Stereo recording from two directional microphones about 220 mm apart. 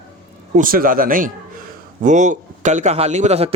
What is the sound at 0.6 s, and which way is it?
Speech, 40° right (ahead or behind).